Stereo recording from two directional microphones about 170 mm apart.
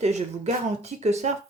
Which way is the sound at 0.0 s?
40° right (ahead or behind).